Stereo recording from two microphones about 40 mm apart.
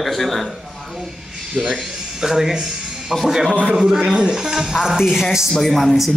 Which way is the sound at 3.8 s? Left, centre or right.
Centre.